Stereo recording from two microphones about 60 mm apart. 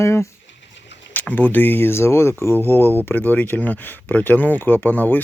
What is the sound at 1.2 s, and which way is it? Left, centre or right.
Speech, left.